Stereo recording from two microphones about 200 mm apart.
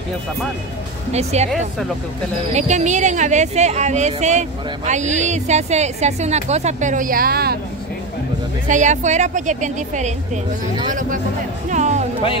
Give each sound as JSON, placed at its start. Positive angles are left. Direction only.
{"t": 1.1, "sound": "speech", "side_deg": -35}
{"t": 2.5, "sound": "speech", "side_deg": -35}
{"t": 8.6, "sound": "speech", "side_deg": -40}